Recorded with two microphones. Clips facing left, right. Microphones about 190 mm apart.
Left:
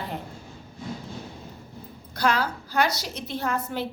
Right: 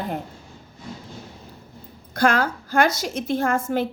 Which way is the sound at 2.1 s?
50° right (ahead or behind).